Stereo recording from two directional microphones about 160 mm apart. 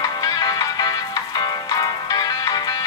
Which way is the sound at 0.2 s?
25° left (ahead or behind).